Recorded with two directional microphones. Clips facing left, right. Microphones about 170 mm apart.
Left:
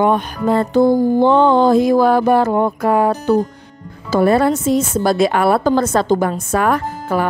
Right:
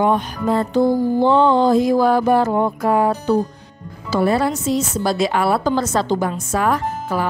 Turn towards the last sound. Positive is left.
turn(degrees=55)  # may be behind; listen again after turning